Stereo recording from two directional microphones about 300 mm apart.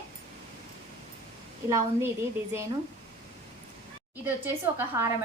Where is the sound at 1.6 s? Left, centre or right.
Centre.